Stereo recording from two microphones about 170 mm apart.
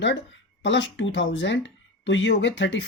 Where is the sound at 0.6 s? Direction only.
90° left.